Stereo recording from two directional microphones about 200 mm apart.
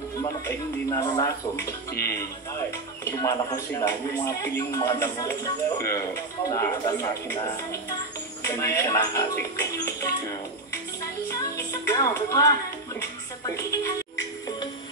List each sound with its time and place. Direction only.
0.2 s speech: 20° left (ahead or behind)
8.5 s speech: 15° left (ahead or behind)
11.2 s music: 15° left (ahead or behind)